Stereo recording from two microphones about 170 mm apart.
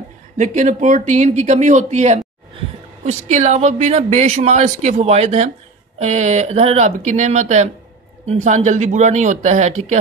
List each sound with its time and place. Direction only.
0.4 s speech: 45° right (ahead or behind)